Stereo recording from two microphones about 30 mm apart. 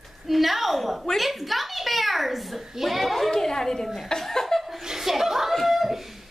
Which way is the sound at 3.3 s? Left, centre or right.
Centre.